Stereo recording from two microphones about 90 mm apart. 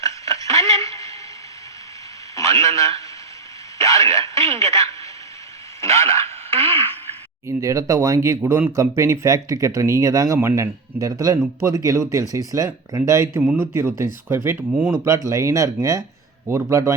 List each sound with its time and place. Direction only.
0.0 s a sound: 35° left (ahead or behind)
2.3 s a man's voice: 35° left (ahead or behind)
7.4 s speech: 35° right (ahead or behind); by 14.9 s 20° right (ahead or behind)
15.0 s speech: 35° right (ahead or behind)